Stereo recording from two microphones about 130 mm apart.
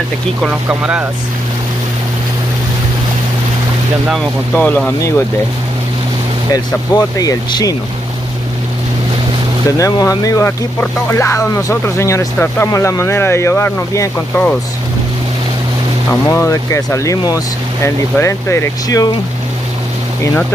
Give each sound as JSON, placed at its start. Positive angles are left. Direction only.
{"t": 0.4, "sound": "speech", "side_deg": -10}
{"t": 4.6, "sound": "speech", "side_deg": 15}
{"t": 6.5, "sound": "speech", "side_deg": 30}
{"t": 9.8, "sound": "speech", "side_deg": 25}
{"t": 14.3, "sound": "speech", "side_deg": 10}
{"t": 16.1, "sound": "speech", "side_deg": 20}